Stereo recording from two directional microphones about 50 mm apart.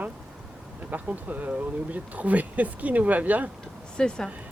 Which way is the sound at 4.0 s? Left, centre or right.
Centre.